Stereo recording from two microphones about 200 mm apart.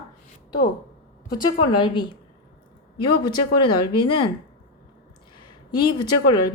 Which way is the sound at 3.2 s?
20° left (ahead or behind).